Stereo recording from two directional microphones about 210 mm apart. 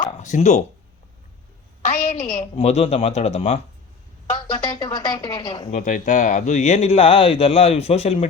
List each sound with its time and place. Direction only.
0.2 s a woman's voice: 35° left (ahead or behind)
1.8 s a woman's voice: 35° left (ahead or behind)
4.8 s speech: 20° left (ahead or behind)
5.7 s speech: 35° left (ahead or behind)